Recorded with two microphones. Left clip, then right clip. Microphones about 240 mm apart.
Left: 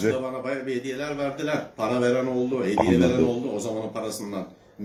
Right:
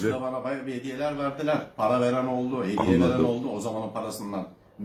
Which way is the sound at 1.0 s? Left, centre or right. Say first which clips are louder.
Even; centre.